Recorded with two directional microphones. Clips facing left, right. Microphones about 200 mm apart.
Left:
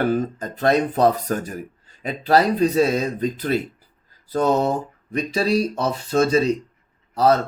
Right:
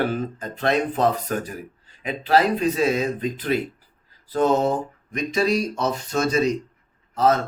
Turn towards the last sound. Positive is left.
turn(degrees=35)  # may be behind; listen again after turning